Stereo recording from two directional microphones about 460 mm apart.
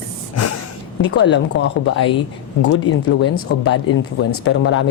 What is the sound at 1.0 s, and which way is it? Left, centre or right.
Speech, left.